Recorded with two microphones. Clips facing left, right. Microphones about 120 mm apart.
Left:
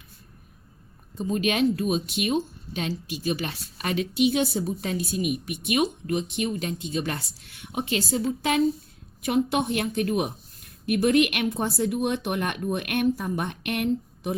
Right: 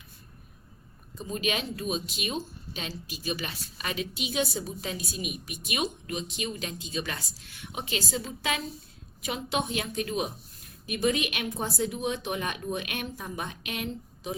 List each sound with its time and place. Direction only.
1.3 s a woman's voice: 50° left (ahead or behind)